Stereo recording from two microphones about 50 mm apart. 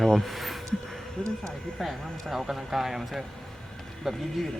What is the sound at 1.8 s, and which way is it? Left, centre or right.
Speech, centre.